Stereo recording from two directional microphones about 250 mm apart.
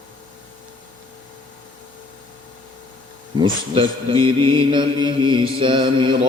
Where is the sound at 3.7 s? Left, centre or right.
Right.